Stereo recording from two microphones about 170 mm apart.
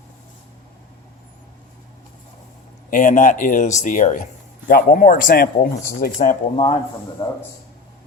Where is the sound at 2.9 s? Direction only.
50° left (ahead or behind).